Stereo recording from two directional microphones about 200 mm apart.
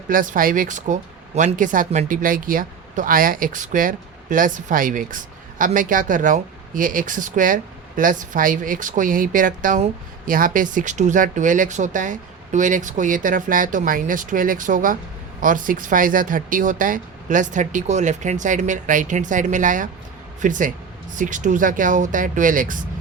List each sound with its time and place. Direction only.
0.1 s speech: 45° right (ahead or behind)